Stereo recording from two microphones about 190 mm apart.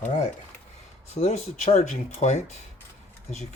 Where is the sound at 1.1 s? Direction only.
35° left (ahead or behind).